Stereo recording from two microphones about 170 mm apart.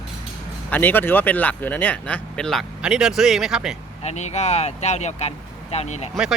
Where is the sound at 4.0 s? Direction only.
40° left (ahead or behind).